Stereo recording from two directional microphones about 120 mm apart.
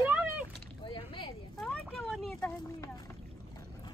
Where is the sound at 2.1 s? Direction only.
Centre (ahead or behind).